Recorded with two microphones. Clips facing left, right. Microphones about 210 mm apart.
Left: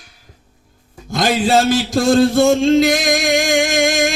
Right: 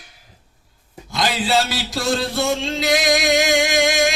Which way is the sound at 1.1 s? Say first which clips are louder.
Left 5 dB; 45° left (ahead or behind).